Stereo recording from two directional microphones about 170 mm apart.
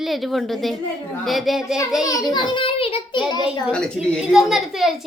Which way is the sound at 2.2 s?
25° left (ahead or behind).